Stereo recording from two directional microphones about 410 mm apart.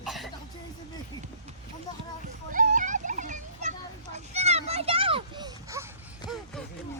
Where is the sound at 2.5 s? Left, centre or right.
Centre.